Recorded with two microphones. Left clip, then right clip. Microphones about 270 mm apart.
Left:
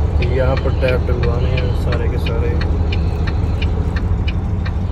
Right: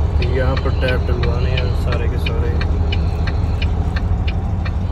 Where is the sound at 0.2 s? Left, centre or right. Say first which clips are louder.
Left 2 dB; centre.